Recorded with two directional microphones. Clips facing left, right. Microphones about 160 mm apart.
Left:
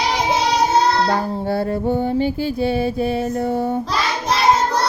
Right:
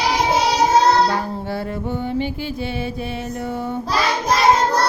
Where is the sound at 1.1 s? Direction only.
35° left (ahead or behind).